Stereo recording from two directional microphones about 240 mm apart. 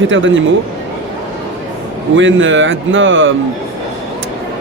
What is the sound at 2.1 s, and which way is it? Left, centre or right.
Speech, right.